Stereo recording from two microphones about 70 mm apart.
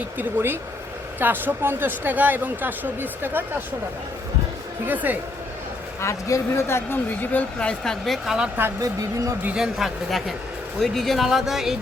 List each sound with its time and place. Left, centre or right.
0.2 s a woman's voice: right
4.9 s a woman's voice: right
6.0 s speech: left
7.2 s speech: left
7.7 s speech: centre
8.8 s speech: right
9.6 s speech: centre